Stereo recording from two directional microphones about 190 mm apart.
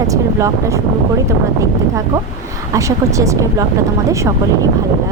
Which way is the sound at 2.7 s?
15° right (ahead or behind).